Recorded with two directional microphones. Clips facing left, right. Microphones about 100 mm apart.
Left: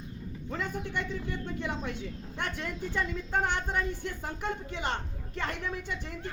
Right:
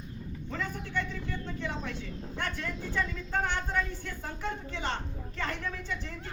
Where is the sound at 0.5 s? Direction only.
15° left (ahead or behind).